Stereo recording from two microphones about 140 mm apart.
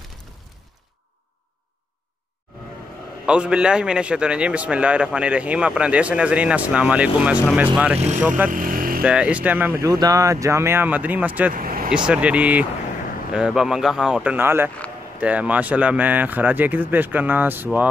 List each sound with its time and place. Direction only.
3.3 s a man's voice: 5° right (ahead or behind)
8.5 s motorcycle: 80° right
9.0 s a man's voice: 5° right (ahead or behind)
9.8 s speech: 25° right (ahead or behind); by 11.5 s 10° right (ahead or behind)
11.5 s vehicle: 90° right
12.1 s a man's voice: 10° right (ahead or behind)